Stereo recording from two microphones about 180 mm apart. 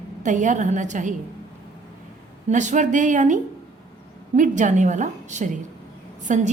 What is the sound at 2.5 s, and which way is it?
A woman's voice, 45° right (ahead or behind).